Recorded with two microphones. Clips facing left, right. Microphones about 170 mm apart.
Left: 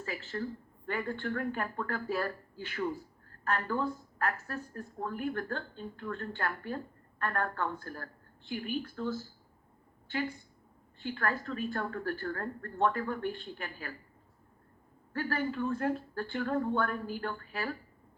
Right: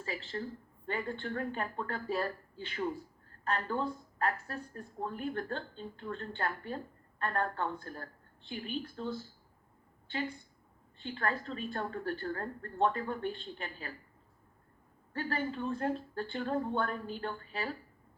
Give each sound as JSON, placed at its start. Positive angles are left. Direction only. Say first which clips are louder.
{"t": 0.0, "sound": "a woman's voice", "louder": "left 2 dB", "side_deg": -30}
{"t": 11.0, "sound": "speech", "louder": "left 1 dB", "side_deg": -25}
{"t": 15.1, "sound": "speech", "louder": "left 2 dB", "side_deg": -25}